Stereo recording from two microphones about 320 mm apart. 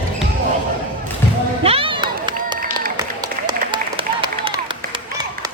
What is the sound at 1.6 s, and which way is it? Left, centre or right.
Run, centre.